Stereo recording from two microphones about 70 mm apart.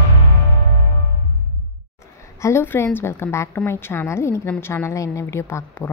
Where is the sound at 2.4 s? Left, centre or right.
Left.